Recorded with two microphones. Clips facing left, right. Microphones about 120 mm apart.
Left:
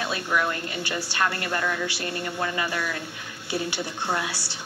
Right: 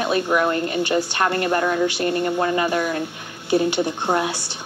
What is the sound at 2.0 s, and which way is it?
Speech, 45° right (ahead or behind).